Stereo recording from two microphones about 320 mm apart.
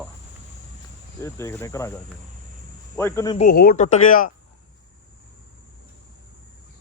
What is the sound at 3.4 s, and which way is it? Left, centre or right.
Speech, left.